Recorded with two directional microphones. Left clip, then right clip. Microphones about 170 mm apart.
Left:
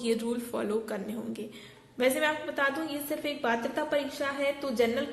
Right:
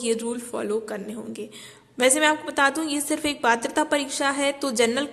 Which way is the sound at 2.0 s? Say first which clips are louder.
Right 7 dB; 40° right (ahead or behind).